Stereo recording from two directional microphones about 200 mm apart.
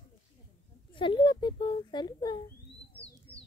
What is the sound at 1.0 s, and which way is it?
A child's voice, 25° left (ahead or behind).